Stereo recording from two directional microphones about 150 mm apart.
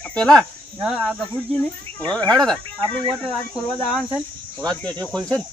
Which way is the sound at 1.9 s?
10° left (ahead or behind).